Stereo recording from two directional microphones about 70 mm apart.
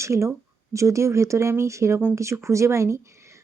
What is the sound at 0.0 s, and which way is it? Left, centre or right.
Speech, right.